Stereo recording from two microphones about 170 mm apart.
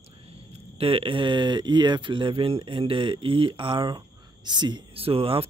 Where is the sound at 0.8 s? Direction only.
30° right (ahead or behind).